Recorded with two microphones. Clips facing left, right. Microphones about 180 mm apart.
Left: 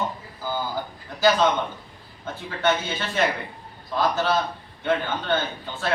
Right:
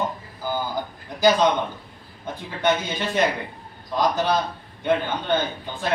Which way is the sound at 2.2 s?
15° right (ahead or behind).